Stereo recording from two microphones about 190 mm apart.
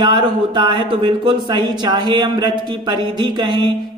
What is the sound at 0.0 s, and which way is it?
Speech, 25° right (ahead or behind).